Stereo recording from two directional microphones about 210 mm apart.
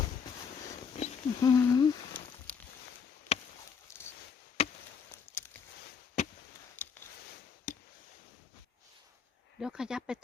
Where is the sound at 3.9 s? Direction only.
10° left (ahead or behind).